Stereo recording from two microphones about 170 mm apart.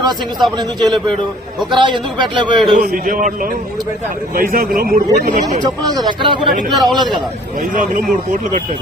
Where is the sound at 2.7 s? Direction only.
55° right (ahead or behind).